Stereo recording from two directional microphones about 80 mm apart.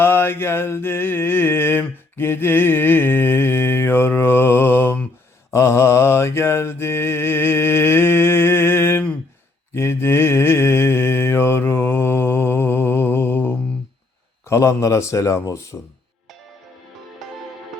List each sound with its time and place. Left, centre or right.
0.0 s mantra: left
14.4 s a man's voice: left